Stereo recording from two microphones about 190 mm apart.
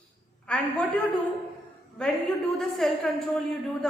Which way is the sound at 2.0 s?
5° left (ahead or behind).